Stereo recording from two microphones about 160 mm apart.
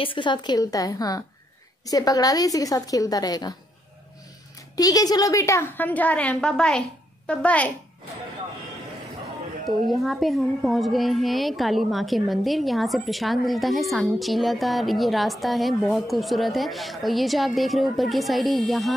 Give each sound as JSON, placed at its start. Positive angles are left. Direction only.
{"t": 0.0, "sound": "a woman's voice", "side_deg": 30}
{"t": 4.7, "sound": "a woman's voice", "side_deg": 25}
{"t": 9.7, "sound": "a woman's voice", "side_deg": 0}